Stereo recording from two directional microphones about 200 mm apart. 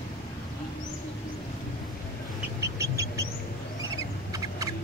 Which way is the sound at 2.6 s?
15° right (ahead or behind).